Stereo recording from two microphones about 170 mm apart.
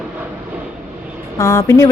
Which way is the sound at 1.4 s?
15° left (ahead or behind).